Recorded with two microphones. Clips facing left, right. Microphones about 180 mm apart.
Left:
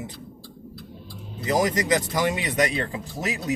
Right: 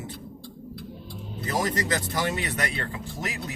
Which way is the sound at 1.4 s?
15° left (ahead or behind).